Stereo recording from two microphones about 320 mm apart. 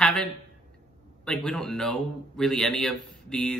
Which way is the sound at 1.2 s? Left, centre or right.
Centre.